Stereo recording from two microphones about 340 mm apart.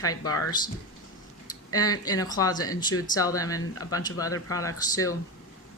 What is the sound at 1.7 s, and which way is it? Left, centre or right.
Speech, centre.